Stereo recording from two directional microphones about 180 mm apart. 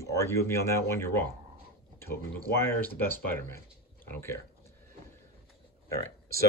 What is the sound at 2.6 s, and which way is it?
Speech, 10° left (ahead or behind).